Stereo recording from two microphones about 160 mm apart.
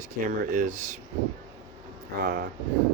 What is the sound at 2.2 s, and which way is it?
Speech, 70° right (ahead or behind).